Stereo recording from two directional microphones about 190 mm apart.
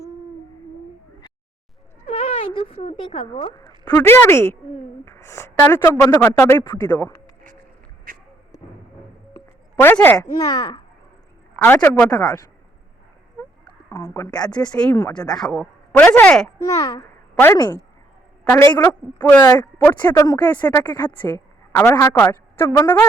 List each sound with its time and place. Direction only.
2.0 s speech: 30° left (ahead or behind)
3.8 s speech: 10° left (ahead or behind)
9.7 s speech: 10° left (ahead or behind)
12.1 s speech: 20° left (ahead or behind)
13.9 s speech: 15° left (ahead or behind)
14.5 s speech: 5° left (ahead or behind)
15.4 s speech: 5° left (ahead or behind)
16.6 s a child's voice: 20° left (ahead or behind)
20.8 s a woman's voice: 20° left (ahead or behind)